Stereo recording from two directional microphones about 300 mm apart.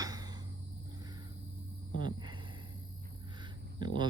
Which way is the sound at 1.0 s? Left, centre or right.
Centre.